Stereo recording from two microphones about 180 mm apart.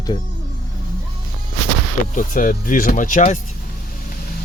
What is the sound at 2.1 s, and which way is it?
Speech, 50° left (ahead or behind).